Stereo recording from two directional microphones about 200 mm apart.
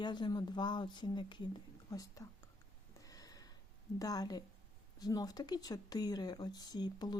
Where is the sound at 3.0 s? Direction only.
20° left (ahead or behind).